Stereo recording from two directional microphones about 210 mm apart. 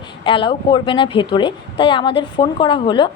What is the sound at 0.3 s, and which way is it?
A woman's voice, 25° left (ahead or behind).